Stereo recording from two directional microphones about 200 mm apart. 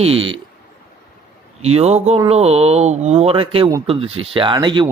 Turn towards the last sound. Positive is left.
turn(degrees=-25)  # may be behind; listen again after turning